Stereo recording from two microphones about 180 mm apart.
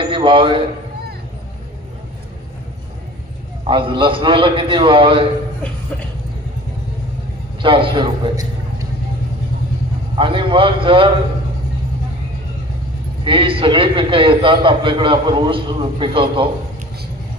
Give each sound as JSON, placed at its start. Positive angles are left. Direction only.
{"t": 0.0, "sound": "a sound", "side_deg": -30}
{"t": 3.7, "sound": "a man's voice", "side_deg": -30}
{"t": 7.6, "sound": "a man's voice", "side_deg": -30}
{"t": 10.2, "sound": "a man's voice", "side_deg": -30}
{"t": 13.2, "sound": "a man's voice", "side_deg": -30}